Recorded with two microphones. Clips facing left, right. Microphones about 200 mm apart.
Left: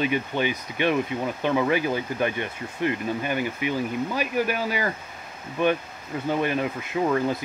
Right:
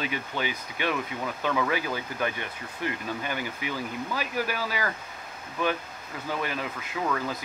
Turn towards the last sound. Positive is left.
turn(degrees=25)  # may be behind; listen again after turning